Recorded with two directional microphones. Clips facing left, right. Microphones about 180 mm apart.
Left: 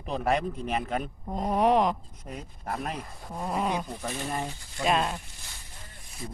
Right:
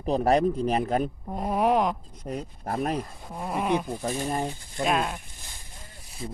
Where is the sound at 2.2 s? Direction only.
40° right (ahead or behind).